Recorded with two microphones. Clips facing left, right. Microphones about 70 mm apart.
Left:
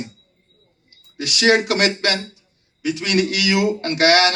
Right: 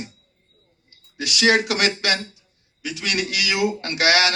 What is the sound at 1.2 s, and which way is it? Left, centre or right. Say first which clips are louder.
Speech: left 2 dB; left.